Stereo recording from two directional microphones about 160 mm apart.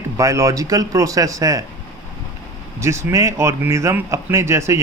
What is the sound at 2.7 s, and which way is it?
Speech, 15° right (ahead or behind).